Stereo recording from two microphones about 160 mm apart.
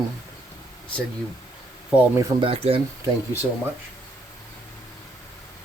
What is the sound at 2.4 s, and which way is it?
Speech, 35° right (ahead or behind).